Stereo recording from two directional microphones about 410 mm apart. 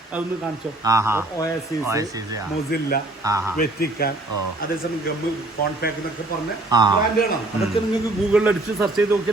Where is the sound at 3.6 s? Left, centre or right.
Left.